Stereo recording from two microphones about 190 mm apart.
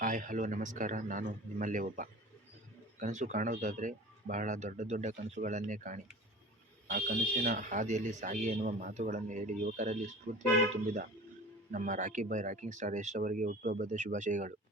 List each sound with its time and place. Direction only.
0.0 s speech: 45° right (ahead or behind)
11.7 s speech: 40° right (ahead or behind)